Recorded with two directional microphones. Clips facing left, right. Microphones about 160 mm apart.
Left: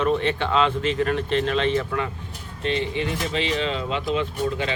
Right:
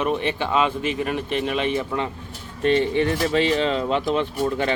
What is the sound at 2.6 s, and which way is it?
Speech, 50° right (ahead or behind).